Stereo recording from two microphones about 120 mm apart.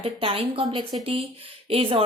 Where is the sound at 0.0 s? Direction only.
50° right (ahead or behind).